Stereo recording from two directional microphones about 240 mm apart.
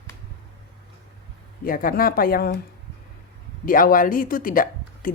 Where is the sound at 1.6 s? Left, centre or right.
Left.